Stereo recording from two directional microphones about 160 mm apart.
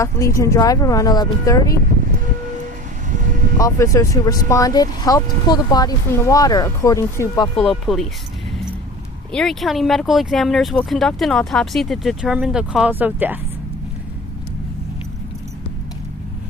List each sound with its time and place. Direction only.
0.0 s speech: 20° left (ahead or behind)
3.6 s speech: 20° left (ahead or behind)
7.5 s speech: centre (ahead or behind)
9.3 s speech: centre (ahead or behind)